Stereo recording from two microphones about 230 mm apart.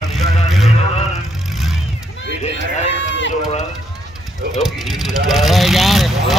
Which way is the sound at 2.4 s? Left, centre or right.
Left.